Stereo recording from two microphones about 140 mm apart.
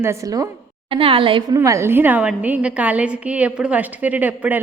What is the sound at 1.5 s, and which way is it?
A woman's voice, 20° right (ahead or behind).